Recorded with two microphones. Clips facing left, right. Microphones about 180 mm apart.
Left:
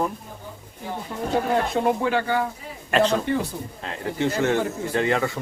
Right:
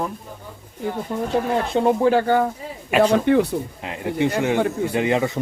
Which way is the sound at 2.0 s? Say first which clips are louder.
Right 6 dB; 45° right (ahead or behind).